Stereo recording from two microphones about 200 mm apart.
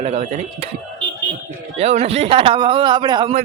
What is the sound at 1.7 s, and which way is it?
Speech, 30° right (ahead or behind).